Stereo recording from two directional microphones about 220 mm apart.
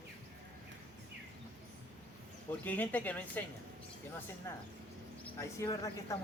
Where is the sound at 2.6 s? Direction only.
5° left (ahead or behind).